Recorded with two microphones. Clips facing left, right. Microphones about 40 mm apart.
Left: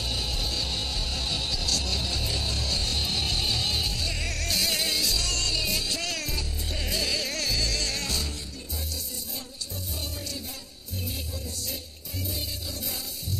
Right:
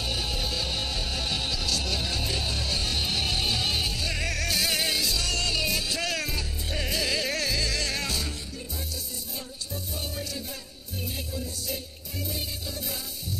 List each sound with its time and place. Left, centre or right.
0.0 s music: centre